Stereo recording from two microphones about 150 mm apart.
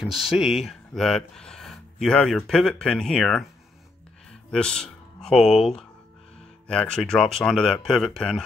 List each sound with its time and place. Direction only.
0.0 s speech: 5° right (ahead or behind)
4.3 s music: 5° left (ahead or behind)
6.7 s speech: 5° left (ahead or behind)